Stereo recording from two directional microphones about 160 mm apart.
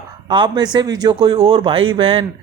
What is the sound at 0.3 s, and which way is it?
Speech, 30° right (ahead or behind).